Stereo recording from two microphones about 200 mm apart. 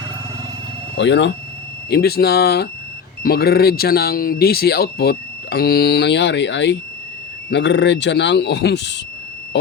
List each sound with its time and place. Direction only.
0.9 s speech: 60° left (ahead or behind)